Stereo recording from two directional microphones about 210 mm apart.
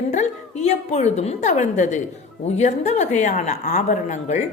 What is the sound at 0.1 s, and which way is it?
A woman's voice, 35° left (ahead or behind).